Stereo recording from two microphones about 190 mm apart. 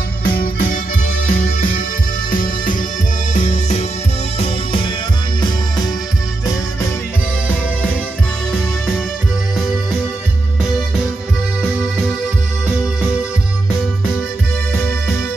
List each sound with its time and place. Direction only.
0.2 s music: 50° left (ahead or behind); by 4.9 s 30° left (ahead or behind)